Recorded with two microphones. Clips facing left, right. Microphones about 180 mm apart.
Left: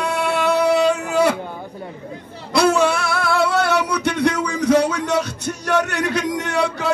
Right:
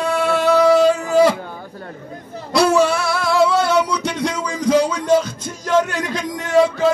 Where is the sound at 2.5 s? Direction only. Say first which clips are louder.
Right 1 dB; 55° left (ahead or behind).